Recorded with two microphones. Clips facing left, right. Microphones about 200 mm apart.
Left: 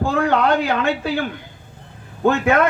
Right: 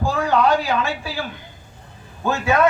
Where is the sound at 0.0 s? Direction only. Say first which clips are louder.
Left 1 dB; 60° left (ahead or behind).